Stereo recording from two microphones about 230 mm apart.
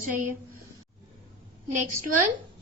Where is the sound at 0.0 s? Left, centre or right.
Right.